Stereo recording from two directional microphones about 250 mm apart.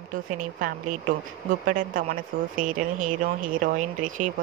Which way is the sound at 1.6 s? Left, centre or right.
Right.